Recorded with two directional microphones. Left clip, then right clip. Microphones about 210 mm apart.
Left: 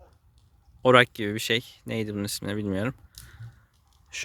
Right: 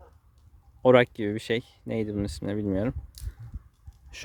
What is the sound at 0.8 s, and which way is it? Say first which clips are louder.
Speech: left 1 dB; 10° right (ahead or behind).